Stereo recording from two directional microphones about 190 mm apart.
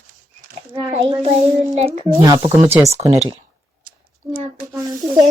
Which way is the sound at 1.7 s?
35° right (ahead or behind).